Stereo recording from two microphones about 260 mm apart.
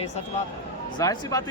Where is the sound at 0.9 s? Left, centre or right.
Centre.